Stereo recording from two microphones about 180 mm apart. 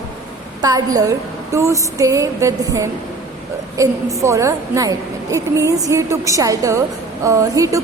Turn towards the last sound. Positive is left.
turn(degrees=-20)  # may be behind; listen again after turning